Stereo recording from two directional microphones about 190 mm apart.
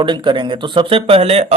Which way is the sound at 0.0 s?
25° right (ahead or behind).